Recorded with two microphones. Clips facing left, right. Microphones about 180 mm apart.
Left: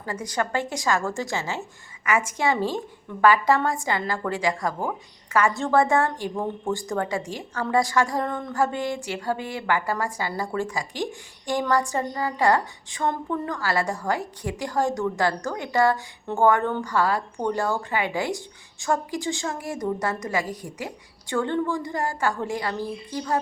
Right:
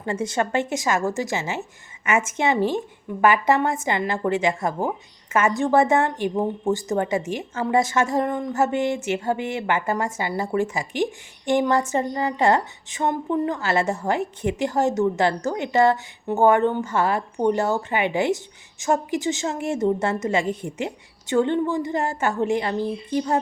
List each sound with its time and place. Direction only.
0.0 s a woman's voice: 25° right (ahead or behind)